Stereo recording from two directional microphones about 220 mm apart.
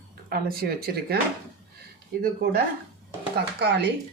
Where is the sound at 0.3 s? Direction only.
40° right (ahead or behind).